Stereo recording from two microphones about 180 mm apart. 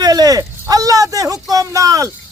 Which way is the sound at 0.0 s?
20° right (ahead or behind).